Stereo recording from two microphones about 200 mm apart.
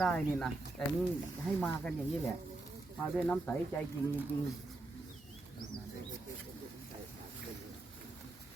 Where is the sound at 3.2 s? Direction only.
5° left (ahead or behind).